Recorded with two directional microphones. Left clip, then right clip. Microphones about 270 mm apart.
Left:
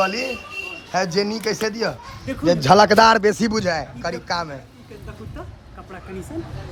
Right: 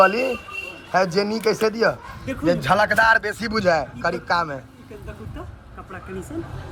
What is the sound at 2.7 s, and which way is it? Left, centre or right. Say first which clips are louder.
Speech: left 6 dB; left.